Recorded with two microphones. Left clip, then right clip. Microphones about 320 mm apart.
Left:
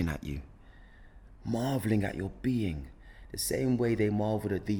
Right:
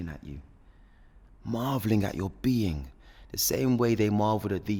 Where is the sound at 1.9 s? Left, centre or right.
Right.